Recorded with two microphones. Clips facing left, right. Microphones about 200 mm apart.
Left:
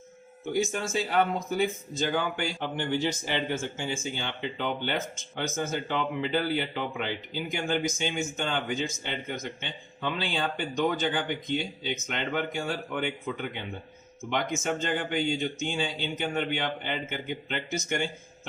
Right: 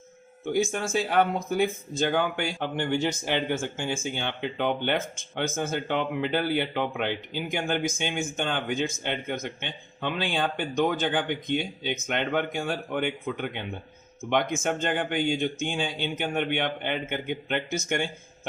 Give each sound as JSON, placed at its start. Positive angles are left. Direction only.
{"t": 0.5, "sound": "speech", "side_deg": -55}